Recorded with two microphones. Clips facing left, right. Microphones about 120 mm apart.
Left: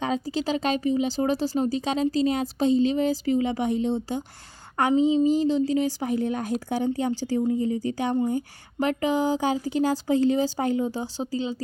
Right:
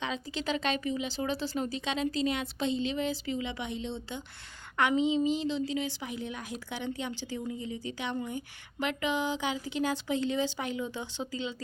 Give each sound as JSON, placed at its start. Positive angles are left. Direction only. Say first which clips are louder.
{"t": 0.0, "sound": "a woman's voice", "louder": "left 8 dB", "side_deg": 40}